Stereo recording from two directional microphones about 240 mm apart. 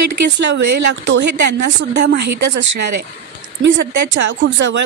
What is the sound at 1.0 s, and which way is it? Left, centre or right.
A woman's voice, right.